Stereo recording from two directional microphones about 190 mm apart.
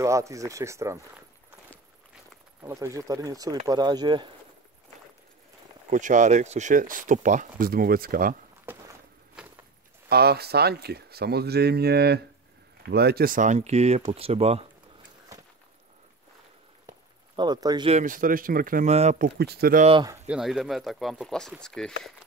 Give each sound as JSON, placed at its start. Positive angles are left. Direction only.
{"t": 0.0, "sound": "speech", "side_deg": -15}
{"t": 2.6, "sound": "speech", "side_deg": -15}
{"t": 5.9, "sound": "speech", "side_deg": -40}
{"t": 10.0, "sound": "speech", "side_deg": -55}
{"t": 17.4, "sound": "speech", "side_deg": -20}
{"t": 17.9, "sound": "speech", "side_deg": -45}
{"t": 19.2, "sound": "speech", "side_deg": -55}
{"t": 19.8, "sound": "speech", "side_deg": -30}
{"t": 20.2, "sound": "speech", "side_deg": -5}